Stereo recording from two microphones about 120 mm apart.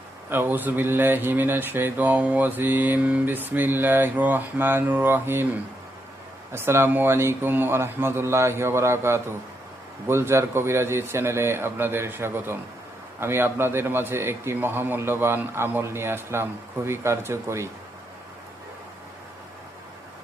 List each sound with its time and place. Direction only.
0.3 s speech: 15° right (ahead or behind)
6.5 s a man's voice: 20° right (ahead or behind)